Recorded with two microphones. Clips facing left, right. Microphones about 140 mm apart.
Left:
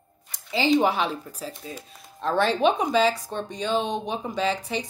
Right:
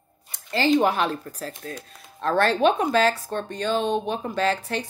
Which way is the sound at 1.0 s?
10° left (ahead or behind).